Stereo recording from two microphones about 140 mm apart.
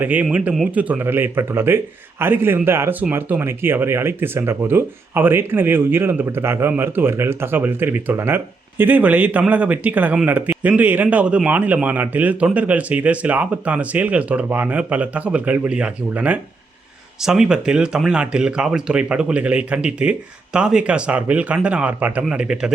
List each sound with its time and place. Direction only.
0.0 s a man's voice: 10° right (ahead or behind)